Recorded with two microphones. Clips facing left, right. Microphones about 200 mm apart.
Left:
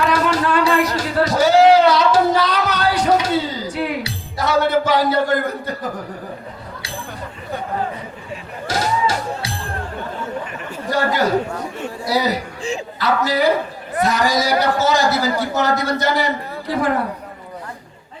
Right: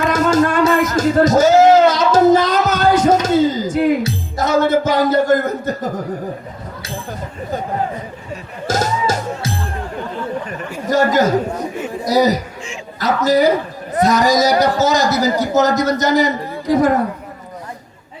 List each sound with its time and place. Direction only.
0.1 s music: 45° right (ahead or behind)
6.8 s chatter: 45° right (ahead or behind)
8.6 s music: 45° right (ahead or behind)
10.8 s a man's voice: 45° right (ahead or behind)